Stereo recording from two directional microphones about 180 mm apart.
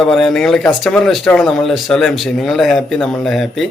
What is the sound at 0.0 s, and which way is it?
Speech, centre (ahead or behind).